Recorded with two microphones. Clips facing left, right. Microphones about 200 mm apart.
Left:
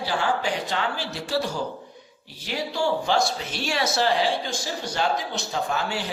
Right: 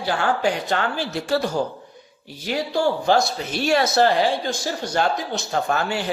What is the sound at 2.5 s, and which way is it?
Speech, 50° right (ahead or behind).